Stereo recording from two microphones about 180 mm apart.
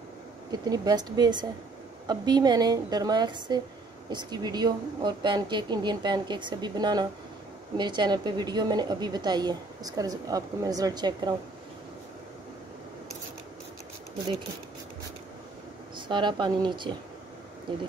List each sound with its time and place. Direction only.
0.5 s a woman's voice: 20° right (ahead or behind)
16.1 s a woman's voice: 25° right (ahead or behind)